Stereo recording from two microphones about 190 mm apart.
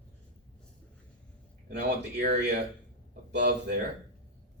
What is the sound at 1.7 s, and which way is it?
Speech, 60° right (ahead or behind).